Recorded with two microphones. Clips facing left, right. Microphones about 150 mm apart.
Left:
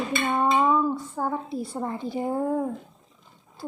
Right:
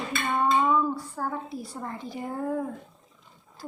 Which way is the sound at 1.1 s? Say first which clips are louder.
Left 4 dB; 25° left (ahead or behind).